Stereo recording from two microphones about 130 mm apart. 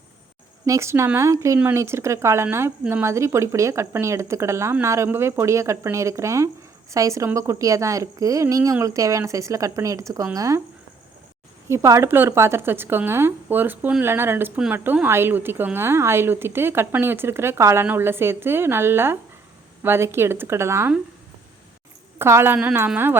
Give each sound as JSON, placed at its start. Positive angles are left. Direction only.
{"t": 0.6, "sound": "speech", "side_deg": -20}
{"t": 11.7, "sound": "a woman's voice", "side_deg": -20}
{"t": 22.2, "sound": "a woman's voice", "side_deg": -20}